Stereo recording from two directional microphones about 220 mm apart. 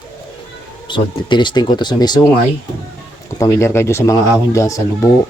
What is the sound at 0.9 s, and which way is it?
Speech, 20° left (ahead or behind).